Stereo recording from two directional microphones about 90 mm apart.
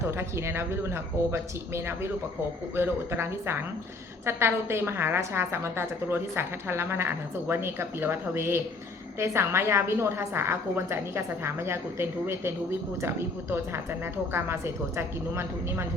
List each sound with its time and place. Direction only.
0.0 s a woman's voice: 30° right (ahead or behind)